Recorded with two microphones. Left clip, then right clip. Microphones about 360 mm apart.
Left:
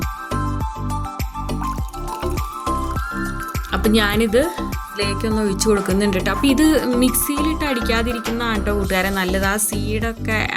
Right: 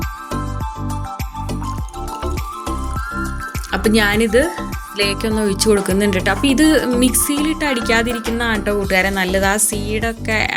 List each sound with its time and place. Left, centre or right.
3.7 s speech: left